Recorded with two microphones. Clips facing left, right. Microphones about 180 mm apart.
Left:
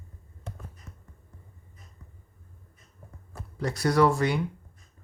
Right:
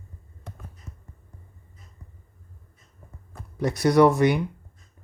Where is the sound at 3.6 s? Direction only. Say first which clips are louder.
Right 5 dB; 20° right (ahead or behind).